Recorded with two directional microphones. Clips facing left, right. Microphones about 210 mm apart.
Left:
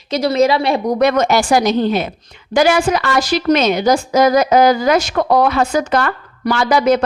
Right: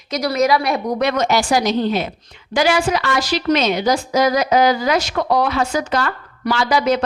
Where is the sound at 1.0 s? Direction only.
50° left (ahead or behind).